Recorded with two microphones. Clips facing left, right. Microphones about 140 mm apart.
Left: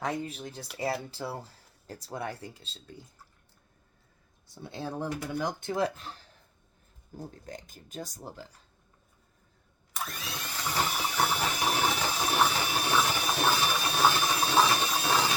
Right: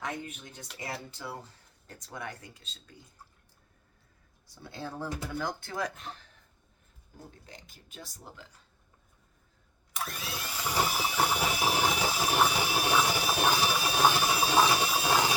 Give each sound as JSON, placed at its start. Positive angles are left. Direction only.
{"t": 0.0, "sound": "speech", "side_deg": 35}
{"t": 4.6, "sound": "speech", "side_deg": 20}
{"t": 7.4, "sound": "speech", "side_deg": 45}
{"t": 10.1, "sound": "a sound", "side_deg": -5}